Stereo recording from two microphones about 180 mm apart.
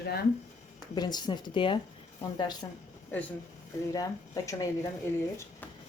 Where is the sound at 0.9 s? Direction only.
25° left (ahead or behind).